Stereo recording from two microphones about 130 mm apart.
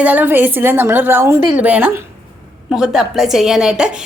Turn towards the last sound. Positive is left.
turn(degrees=-5)  # may be behind; listen again after turning